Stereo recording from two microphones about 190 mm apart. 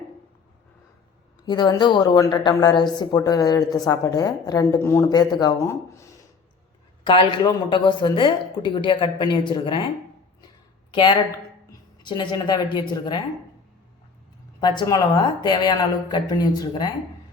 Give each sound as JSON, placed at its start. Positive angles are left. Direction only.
{"t": 1.5, "sound": "a woman's voice", "side_deg": 25}
{"t": 7.0, "sound": "a woman's voice", "side_deg": 25}
{"t": 10.9, "sound": "a woman's voice", "side_deg": 25}
{"t": 14.8, "sound": "a woman's voice", "side_deg": 20}